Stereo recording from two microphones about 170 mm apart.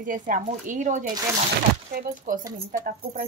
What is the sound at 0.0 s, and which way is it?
Speech, 50° right (ahead or behind).